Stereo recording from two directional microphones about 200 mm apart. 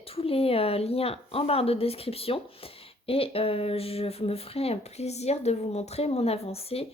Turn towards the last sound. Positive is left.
turn(degrees=30)  # may be behind; listen again after turning